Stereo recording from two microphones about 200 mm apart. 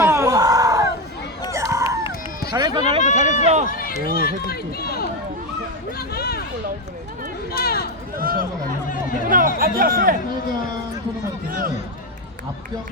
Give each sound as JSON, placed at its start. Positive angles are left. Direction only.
{"t": 0.0, "sound": "a sound", "side_deg": -15}
{"t": 2.5, "sound": "speech", "side_deg": -20}
{"t": 3.0, "sound": "run", "side_deg": 35}
{"t": 3.4, "sound": "speech", "side_deg": -35}
{"t": 3.7, "sound": "run", "side_deg": 45}
{"t": 4.0, "sound": "speech", "side_deg": 50}
{"t": 7.5, "sound": "speech", "side_deg": 50}
{"t": 8.2, "sound": "speech", "side_deg": -45}
{"t": 9.6, "sound": "speech", "side_deg": -50}
{"t": 11.4, "sound": "speech", "side_deg": -45}